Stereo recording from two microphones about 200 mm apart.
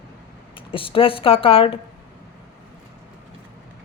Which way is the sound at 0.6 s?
25° left (ahead or behind).